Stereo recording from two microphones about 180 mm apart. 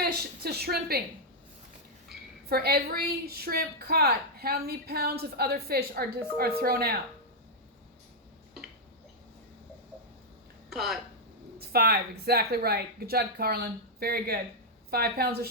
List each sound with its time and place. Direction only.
0.0 s a woman's voice: 60° right (ahead or behind)
2.5 s a woman's voice: 60° right (ahead or behind)
10.7 s speech: centre (ahead or behind)
11.7 s a woman's voice: 60° right (ahead or behind)